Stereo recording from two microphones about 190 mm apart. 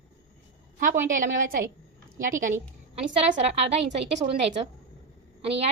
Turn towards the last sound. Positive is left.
turn(degrees=-30)  # may be behind; listen again after turning